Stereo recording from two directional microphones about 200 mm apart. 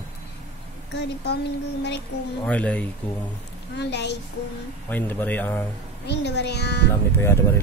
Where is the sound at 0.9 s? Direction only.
55° left (ahead or behind).